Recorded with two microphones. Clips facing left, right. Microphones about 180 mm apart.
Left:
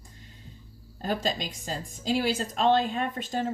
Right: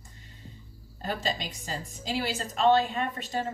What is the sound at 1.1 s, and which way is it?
Speech, 45° left (ahead or behind).